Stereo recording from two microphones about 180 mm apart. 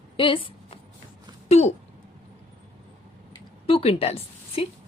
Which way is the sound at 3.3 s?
30° left (ahead or behind).